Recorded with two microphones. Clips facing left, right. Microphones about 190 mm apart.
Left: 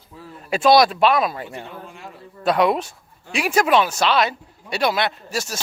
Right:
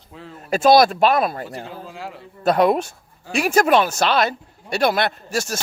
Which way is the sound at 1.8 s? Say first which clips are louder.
Right 5 dB; 90° right.